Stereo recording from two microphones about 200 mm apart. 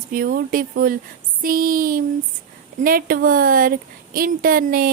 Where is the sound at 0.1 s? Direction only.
45° right (ahead or behind).